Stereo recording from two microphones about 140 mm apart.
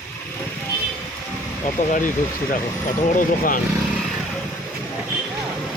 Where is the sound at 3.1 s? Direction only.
70° left (ahead or behind).